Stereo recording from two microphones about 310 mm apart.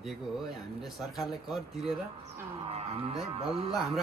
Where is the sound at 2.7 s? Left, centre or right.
Centre.